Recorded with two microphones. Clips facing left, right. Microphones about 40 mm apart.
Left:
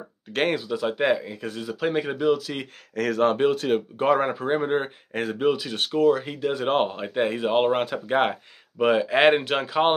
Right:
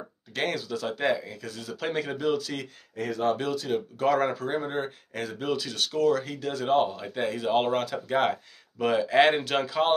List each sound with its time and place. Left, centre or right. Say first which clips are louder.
0.5 s speech: left 5 dB; left
3.0 s speech: left 7 dB; left
3.3 s speech: left 4 dB; left
4.0 s speech: left 1 dB; left
5.4 s speech: left 5 dB; left
6.7 s speech: right 3 dB; left; by 9.8 s centre